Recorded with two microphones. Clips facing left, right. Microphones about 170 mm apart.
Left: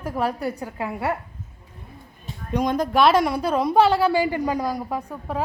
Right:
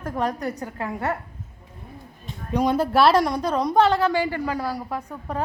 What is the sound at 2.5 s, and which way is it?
A woman's voice, 10° right (ahead or behind).